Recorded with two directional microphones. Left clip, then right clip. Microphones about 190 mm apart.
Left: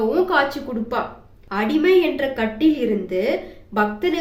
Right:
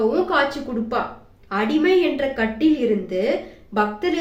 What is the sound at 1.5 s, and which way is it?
Speech, 15° left (ahead or behind).